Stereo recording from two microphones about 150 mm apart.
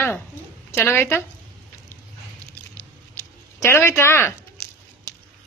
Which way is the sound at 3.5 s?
20° left (ahead or behind).